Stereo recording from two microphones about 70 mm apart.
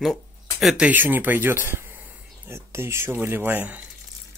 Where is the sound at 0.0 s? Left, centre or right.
Centre.